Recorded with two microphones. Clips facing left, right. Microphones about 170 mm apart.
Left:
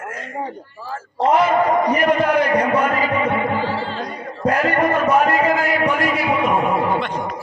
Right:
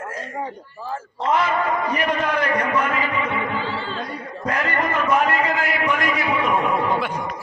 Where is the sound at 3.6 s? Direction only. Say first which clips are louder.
Left 4 dB; 75° left (ahead or behind).